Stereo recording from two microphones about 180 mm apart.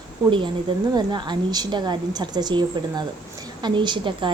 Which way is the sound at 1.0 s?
25° right (ahead or behind).